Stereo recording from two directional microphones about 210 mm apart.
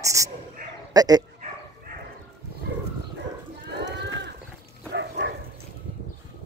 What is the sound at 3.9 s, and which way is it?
Bird, 55° right (ahead or behind).